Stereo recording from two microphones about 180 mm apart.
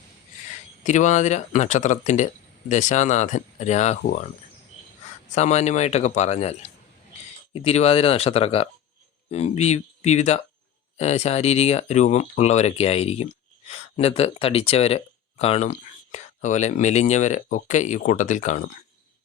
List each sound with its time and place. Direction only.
0.9 s speech: 40° left (ahead or behind)
5.3 s speech: 40° left (ahead or behind)